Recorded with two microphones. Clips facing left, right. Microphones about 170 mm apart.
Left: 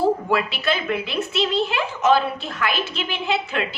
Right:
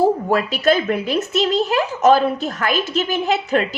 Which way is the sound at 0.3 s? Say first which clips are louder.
Right 5 dB; 45° right (ahead or behind).